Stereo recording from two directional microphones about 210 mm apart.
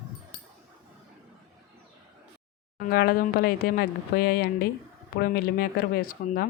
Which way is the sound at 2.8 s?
45° left (ahead or behind).